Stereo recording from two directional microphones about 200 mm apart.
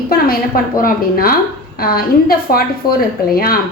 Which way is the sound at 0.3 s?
45° left (ahead or behind).